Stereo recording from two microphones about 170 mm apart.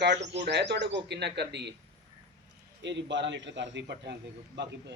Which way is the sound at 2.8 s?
90° right.